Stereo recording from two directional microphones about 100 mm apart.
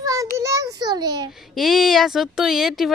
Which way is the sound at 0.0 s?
35° right (ahead or behind).